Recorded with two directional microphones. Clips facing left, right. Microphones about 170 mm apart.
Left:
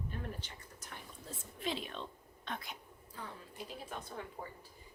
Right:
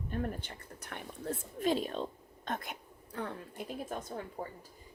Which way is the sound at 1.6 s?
45° right (ahead or behind).